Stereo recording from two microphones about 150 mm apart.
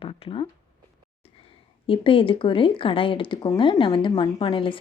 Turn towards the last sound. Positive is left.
turn(degrees=35)  # may be behind; listen again after turning